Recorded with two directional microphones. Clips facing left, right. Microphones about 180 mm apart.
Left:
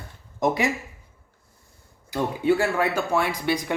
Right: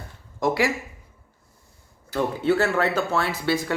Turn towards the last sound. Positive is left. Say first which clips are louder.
# even
turn(degrees=15)  # may be behind; listen again after turning